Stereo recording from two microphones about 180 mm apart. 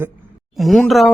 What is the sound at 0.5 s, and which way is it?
Speech, centre (ahead or behind).